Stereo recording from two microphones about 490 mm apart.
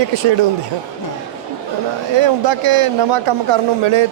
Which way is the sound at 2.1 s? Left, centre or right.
Right.